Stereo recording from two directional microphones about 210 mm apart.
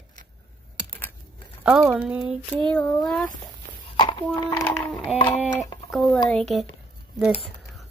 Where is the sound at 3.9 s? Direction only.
20° left (ahead or behind).